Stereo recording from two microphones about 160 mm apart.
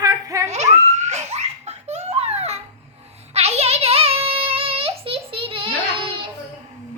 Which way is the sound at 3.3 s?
40° right (ahead or behind).